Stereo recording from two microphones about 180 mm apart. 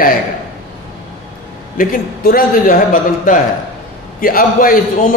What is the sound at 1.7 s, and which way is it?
A man's voice, 50° left (ahead or behind).